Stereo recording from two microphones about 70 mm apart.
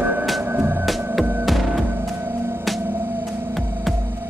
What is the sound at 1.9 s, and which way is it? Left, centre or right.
Music, right.